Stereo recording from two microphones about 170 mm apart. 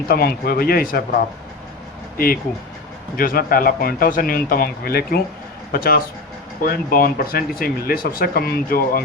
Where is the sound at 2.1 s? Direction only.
60° left (ahead or behind).